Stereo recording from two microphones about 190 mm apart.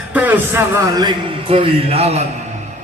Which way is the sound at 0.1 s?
10° right (ahead or behind).